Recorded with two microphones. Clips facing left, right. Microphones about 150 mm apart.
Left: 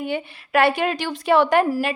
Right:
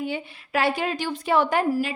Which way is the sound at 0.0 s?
65° left (ahead or behind).